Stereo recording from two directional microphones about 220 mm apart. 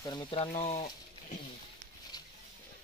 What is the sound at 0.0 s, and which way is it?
Speech, 20° left (ahead or behind).